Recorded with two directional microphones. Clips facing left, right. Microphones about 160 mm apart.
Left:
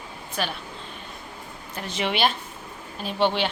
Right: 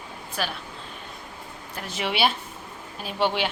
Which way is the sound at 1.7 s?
5° right (ahead or behind).